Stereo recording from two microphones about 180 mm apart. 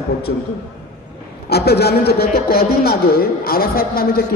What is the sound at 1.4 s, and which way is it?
A man's voice, 65° left (ahead or behind).